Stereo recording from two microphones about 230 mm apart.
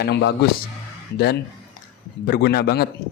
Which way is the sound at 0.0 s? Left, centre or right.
Left.